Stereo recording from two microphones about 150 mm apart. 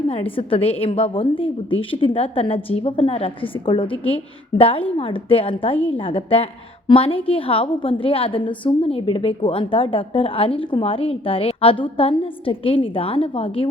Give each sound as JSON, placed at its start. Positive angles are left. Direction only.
{"t": 0.1, "sound": "a woman's voice", "side_deg": 35}